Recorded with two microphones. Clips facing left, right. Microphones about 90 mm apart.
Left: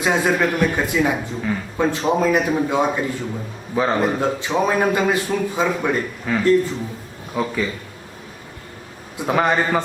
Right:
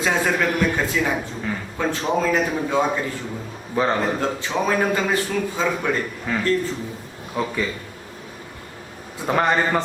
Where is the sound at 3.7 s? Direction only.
5° left (ahead or behind).